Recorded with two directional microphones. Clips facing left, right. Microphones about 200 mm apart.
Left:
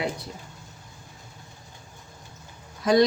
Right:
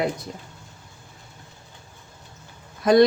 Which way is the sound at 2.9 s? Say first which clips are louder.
Right 4 dB; 55° right (ahead or behind).